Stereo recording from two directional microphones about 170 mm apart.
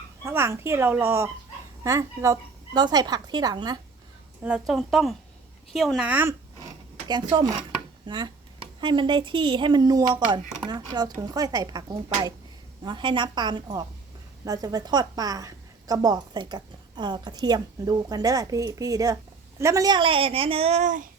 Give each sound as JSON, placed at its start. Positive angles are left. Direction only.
{"t": 0.3, "sound": "a woman's voice", "side_deg": -15}
{"t": 4.4, "sound": "speech", "side_deg": -5}
{"t": 7.1, "sound": "a woman's voice", "side_deg": -25}